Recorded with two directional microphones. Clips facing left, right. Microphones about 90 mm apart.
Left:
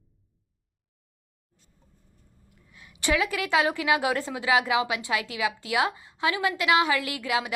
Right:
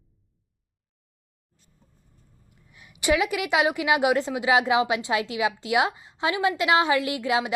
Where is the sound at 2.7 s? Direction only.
20° right (ahead or behind).